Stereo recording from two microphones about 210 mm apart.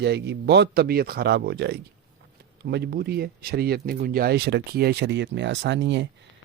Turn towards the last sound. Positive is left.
turn(degrees=-55)  # may be behind; listen again after turning